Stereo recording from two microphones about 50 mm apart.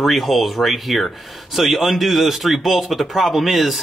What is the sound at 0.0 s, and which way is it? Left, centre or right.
Speech, centre.